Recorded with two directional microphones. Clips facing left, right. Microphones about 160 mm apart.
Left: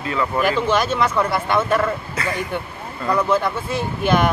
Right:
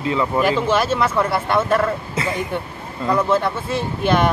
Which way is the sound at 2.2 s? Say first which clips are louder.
Right 3 dB; 25° right (ahead or behind).